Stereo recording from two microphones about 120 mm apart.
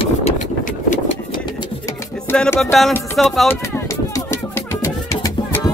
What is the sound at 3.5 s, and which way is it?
Music, 20° left (ahead or behind).